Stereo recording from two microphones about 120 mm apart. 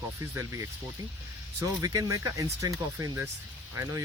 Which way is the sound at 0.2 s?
25° right (ahead or behind).